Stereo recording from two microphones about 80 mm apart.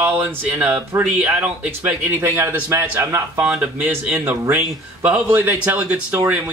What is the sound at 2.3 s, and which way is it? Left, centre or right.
A man's voice, right.